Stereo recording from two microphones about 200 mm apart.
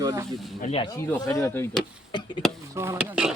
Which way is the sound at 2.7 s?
15° right (ahead or behind).